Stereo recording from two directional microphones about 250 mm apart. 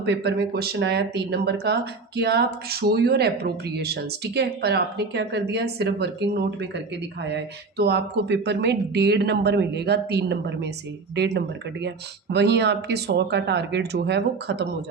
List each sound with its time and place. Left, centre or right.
0.0 s speech: right